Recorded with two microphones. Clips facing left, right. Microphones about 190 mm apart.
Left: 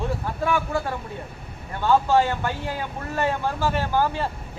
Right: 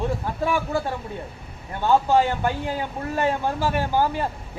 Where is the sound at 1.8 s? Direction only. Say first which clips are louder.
Even; 15° right (ahead or behind).